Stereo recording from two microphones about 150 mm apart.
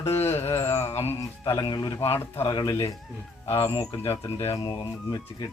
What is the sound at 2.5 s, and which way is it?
Speech, 30° left (ahead or behind).